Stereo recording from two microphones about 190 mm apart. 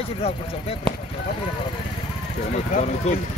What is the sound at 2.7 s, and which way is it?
Speech, 40° left (ahead or behind).